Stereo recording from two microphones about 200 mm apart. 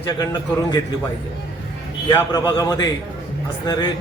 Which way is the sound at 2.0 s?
20° left (ahead or behind).